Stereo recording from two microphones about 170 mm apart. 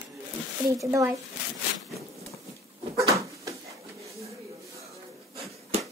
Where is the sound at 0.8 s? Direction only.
20° right (ahead or behind).